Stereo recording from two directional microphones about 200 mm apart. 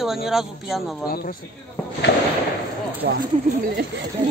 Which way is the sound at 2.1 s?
55° left (ahead or behind).